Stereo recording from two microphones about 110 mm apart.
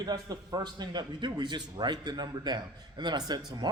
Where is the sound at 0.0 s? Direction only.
35° right (ahead or behind).